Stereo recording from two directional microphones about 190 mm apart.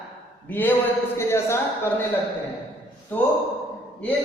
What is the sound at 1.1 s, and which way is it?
Speech, 15° left (ahead or behind).